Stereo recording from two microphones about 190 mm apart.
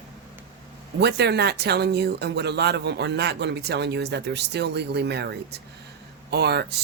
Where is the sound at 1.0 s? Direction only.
60° right (ahead or behind).